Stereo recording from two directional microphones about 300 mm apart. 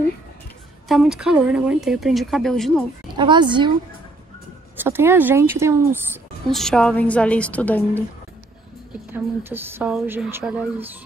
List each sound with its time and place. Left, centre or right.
0.8 s speech: centre
3.2 s a woman's voice: centre
4.7 s a woman's voice: centre
9.1 s a woman's voice: centre